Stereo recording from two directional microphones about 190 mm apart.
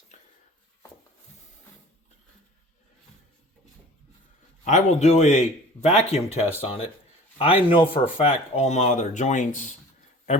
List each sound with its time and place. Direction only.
4.6 s a man's voice: 40° left (ahead or behind)